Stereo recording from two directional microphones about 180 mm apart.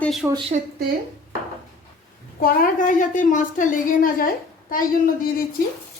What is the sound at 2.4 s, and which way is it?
A woman's voice, 50° left (ahead or behind).